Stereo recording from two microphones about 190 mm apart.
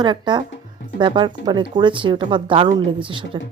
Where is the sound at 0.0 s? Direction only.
25° right (ahead or behind).